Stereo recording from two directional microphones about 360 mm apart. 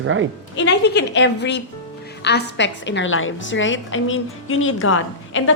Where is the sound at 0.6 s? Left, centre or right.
Left.